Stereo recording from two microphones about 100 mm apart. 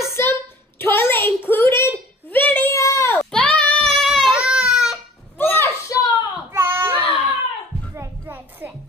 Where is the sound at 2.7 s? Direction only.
30° left (ahead or behind).